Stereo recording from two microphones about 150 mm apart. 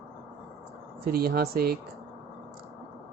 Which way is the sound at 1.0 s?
90° right.